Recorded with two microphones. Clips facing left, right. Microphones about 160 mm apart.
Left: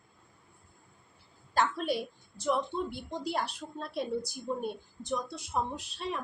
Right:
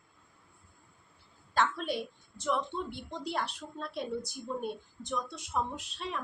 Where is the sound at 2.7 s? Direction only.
10° left (ahead or behind).